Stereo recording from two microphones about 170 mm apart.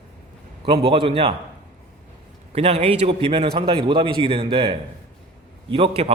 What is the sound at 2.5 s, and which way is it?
A man's voice, 35° right (ahead or behind).